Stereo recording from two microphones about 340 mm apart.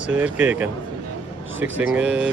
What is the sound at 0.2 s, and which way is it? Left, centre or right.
Speech, centre.